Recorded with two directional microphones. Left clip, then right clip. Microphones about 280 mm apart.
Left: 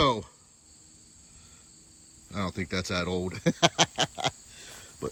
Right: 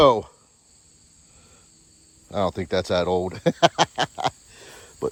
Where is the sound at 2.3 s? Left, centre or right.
Centre.